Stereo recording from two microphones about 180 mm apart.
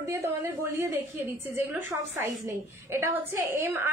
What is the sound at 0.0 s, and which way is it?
A woman's voice, 15° right (ahead or behind).